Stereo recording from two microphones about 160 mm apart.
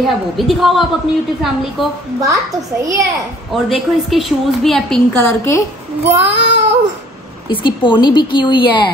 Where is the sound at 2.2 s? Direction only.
20° right (ahead or behind).